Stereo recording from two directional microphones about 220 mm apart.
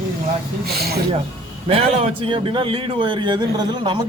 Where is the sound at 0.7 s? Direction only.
45° right (ahead or behind).